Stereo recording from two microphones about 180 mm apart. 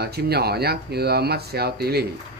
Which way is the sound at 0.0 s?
60° right (ahead or behind).